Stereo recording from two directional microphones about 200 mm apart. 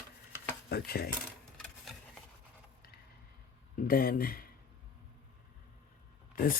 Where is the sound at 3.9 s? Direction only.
45° left (ahead or behind).